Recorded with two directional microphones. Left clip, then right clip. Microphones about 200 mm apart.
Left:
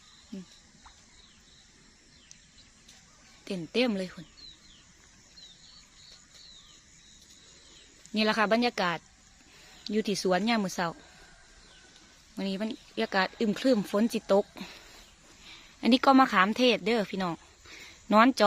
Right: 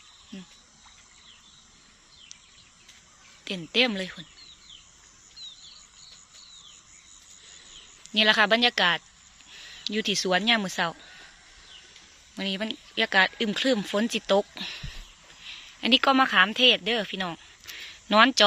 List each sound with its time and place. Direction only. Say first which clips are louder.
3.4 s speech: right 5 dB; 5° left (ahead or behind)
8.1 s speech: right 6 dB; 5° left (ahead or behind)
12.4 s speech: right 4 dB; 5° left (ahead or behind)
15.8 s speech: right 1 dB; 20° left (ahead or behind)
18.1 s speech: right 3 dB; 10° left (ahead or behind)